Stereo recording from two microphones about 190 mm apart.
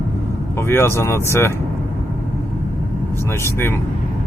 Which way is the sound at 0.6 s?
10° left (ahead or behind).